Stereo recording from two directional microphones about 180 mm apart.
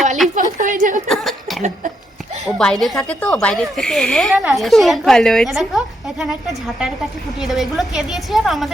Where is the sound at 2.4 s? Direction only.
5° left (ahead or behind).